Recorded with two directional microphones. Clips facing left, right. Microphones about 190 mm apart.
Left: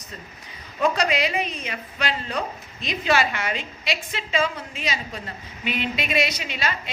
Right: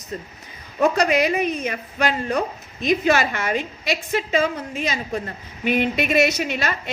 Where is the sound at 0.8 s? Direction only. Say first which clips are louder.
Right 4 dB; 45° right (ahead or behind).